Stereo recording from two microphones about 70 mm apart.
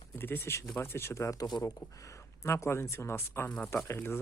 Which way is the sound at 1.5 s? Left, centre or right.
Left.